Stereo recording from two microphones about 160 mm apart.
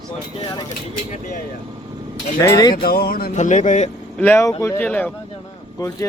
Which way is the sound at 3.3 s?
50° left (ahead or behind).